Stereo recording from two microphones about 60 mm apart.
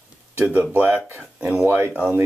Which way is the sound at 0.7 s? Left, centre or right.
Right.